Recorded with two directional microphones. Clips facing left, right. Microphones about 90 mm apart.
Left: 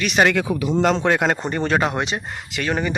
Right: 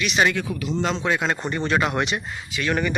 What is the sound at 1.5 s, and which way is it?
Speech, 40° left (ahead or behind).